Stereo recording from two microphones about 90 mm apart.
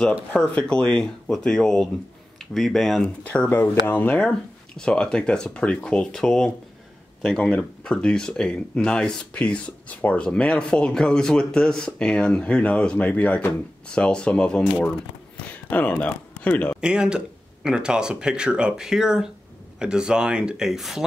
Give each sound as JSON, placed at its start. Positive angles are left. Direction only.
{"t": 0.3, "sound": "speech", "side_deg": 10}
{"t": 3.3, "sound": "speech", "side_deg": 20}
{"t": 15.4, "sound": "a sound", "side_deg": 15}
{"t": 16.8, "sound": "speech", "side_deg": -10}